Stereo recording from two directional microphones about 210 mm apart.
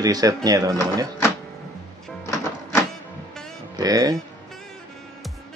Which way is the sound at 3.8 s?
15° right (ahead or behind).